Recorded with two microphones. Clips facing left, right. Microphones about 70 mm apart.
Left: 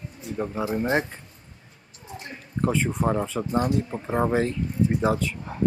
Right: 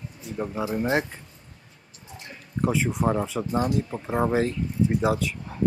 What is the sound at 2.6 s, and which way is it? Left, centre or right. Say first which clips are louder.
Speech: even; centre.